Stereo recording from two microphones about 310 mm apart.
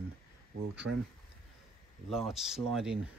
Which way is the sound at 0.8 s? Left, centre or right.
Right.